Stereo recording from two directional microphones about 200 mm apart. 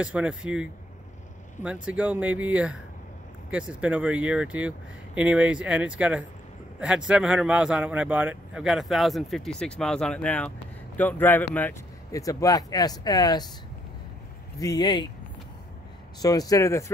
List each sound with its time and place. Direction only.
0.0 s speech: 5° right (ahead or behind); by 13.5 s 20° left (ahead or behind)
14.6 s speech: 20° left (ahead or behind)
16.2 s speech: 20° left (ahead or behind)